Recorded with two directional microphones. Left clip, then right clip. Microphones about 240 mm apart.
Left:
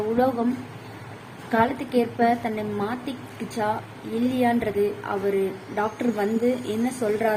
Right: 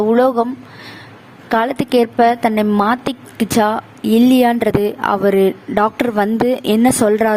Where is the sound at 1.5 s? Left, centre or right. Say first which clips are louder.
Right 7 dB; right.